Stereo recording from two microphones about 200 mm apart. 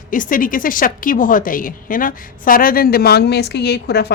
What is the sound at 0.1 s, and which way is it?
A woman's voice, 40° left (ahead or behind).